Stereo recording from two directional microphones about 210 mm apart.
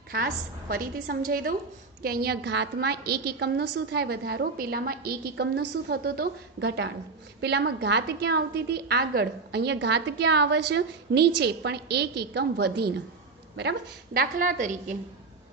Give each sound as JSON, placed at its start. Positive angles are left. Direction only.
{"t": 0.7, "sound": "a woman's voice", "side_deg": -45}